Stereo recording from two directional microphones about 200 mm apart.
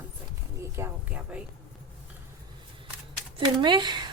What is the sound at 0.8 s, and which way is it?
Speech, 5° right (ahead or behind).